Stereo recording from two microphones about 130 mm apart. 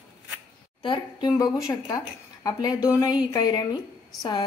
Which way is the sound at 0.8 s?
30° left (ahead or behind).